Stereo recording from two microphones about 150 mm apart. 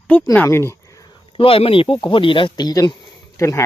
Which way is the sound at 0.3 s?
15° left (ahead or behind).